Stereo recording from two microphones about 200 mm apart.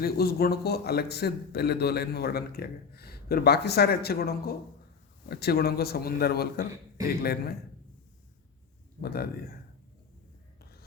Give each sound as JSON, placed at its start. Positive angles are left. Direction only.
{"t": 0.0, "sound": "a man's voice", "side_deg": 50}
{"t": 9.0, "sound": "a man's voice", "side_deg": 50}